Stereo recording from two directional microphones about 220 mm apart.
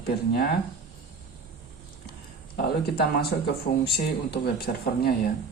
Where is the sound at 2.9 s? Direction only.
45° left (ahead or behind).